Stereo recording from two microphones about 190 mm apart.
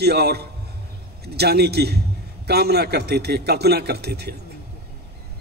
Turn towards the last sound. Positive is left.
turn(degrees=-60)  # may be behind; listen again after turning